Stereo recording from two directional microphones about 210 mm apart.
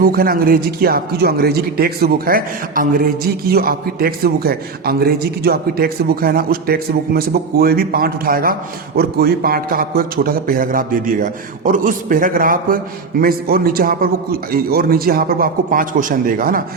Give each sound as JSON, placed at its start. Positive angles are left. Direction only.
{"t": 0.0, "sound": "a man's voice", "side_deg": -45}